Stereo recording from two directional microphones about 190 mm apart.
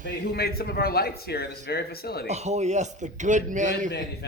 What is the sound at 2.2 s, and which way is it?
Speech, 35° right (ahead or behind).